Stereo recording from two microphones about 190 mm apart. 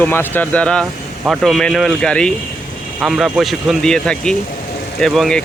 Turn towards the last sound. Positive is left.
turn(degrees=0)  # may be behind; listen again after turning